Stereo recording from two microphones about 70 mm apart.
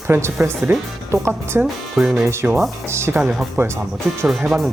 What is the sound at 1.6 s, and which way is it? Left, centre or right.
Speech, right.